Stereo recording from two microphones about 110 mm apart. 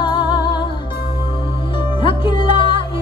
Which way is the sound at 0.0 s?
45° left (ahead or behind).